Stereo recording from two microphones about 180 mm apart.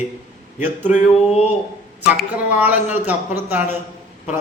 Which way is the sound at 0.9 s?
35° left (ahead or behind).